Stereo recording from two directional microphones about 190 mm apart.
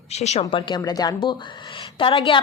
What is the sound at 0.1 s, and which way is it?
A woman's voice, 35° left (ahead or behind).